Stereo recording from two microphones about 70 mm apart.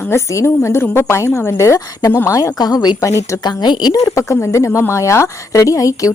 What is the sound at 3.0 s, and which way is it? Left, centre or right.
Speech, left.